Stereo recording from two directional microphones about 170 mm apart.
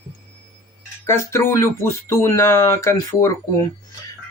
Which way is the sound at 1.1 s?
15° left (ahead or behind).